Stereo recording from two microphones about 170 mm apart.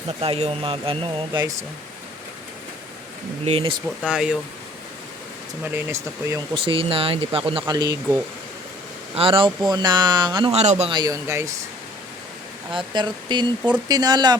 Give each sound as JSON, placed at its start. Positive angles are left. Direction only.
{"t": 0.2, "sound": "speech", "side_deg": -35}
{"t": 3.4, "sound": "speech", "side_deg": -35}
{"t": 3.8, "sound": "speech", "side_deg": -5}
{"t": 5.7, "sound": "speech", "side_deg": -15}
{"t": 6.6, "sound": "speech", "side_deg": -30}
{"t": 7.7, "sound": "speech", "side_deg": -20}
{"t": 9.1, "sound": "speech", "side_deg": -30}
{"t": 10.9, "sound": "speech", "side_deg": -20}
{"t": 12.7, "sound": "speech", "side_deg": -25}